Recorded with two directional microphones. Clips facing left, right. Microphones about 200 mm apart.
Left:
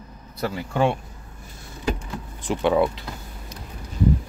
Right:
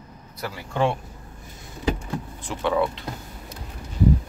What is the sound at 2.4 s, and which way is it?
Speech, 15° left (ahead or behind).